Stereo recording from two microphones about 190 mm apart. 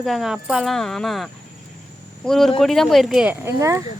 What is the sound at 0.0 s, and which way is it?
Speech, centre (ahead or behind).